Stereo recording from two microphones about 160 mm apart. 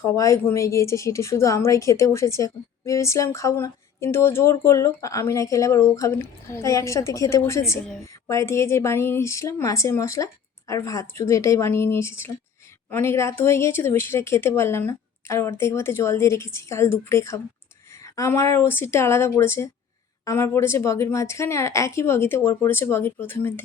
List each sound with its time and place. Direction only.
0.0 s a woman's voice: 20° left (ahead or behind)